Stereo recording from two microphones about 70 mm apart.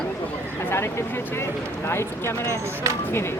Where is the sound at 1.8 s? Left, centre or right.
Left.